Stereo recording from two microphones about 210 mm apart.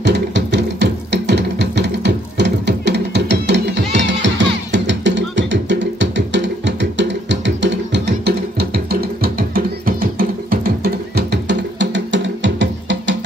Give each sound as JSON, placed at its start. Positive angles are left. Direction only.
{"t": 0.0, "sound": "music", "side_deg": -55}
{"t": 8.5, "sound": "music", "side_deg": -45}